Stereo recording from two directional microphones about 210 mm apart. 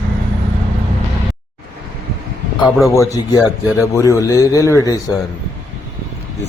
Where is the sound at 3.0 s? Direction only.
15° left (ahead or behind).